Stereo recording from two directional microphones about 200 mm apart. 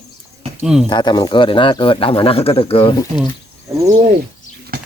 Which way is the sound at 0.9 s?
20° left (ahead or behind).